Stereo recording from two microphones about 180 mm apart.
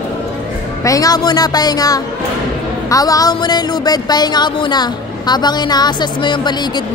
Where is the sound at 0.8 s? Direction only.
20° left (ahead or behind).